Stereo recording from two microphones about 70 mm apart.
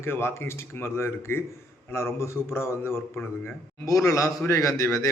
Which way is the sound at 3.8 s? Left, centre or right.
Left.